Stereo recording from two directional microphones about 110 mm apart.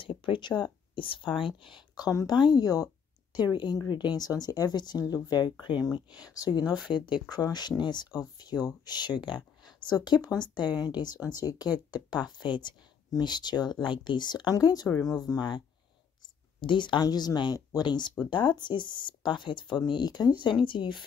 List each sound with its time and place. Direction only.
0.0 s speech: 50° left (ahead or behind)
16.6 s speech: 45° left (ahead or behind)